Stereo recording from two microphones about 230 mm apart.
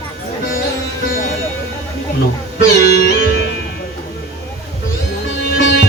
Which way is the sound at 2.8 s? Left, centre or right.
Left.